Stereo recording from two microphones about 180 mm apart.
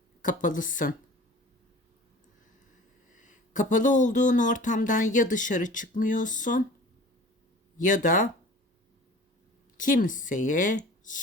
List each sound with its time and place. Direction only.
0.2 s speech: 45° left (ahead or behind)
3.2 s speech: 45° left (ahead or behind)
7.8 s speech: 45° left (ahead or behind)
9.7 s speech: 45° left (ahead or behind)